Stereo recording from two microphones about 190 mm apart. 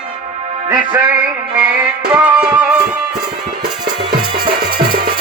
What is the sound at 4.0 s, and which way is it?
Music, 25° right (ahead or behind).